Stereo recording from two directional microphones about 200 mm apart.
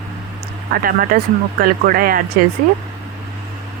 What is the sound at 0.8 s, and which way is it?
Speech, 45° right (ahead or behind).